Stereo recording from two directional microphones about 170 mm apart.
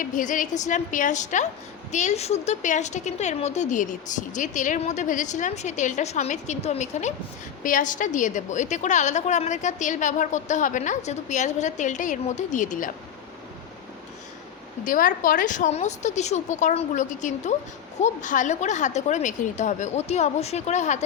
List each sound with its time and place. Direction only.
0.0 s a woman's voice: 50° left (ahead or behind)
14.8 s a woman's voice: 55° left (ahead or behind)